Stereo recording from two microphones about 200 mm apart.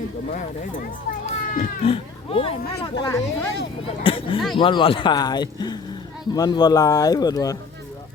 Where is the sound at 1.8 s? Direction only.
30° left (ahead or behind).